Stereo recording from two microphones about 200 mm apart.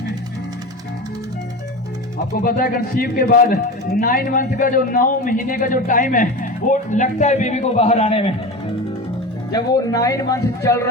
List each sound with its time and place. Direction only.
2.3 s a man's voice: 50° left (ahead or behind); by 8.4 s 30° left (ahead or behind)
9.5 s speech: 20° left (ahead or behind)